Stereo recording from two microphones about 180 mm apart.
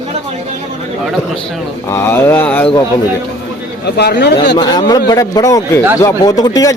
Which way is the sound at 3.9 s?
70° left (ahead or behind).